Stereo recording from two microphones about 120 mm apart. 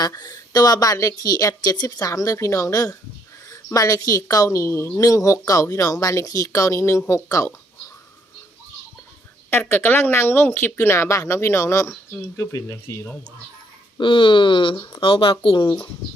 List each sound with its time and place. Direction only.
0.0 s speech: 35° left (ahead or behind)
9.5 s speech: 20° left (ahead or behind)
14.0 s speech: 45° left (ahead or behind)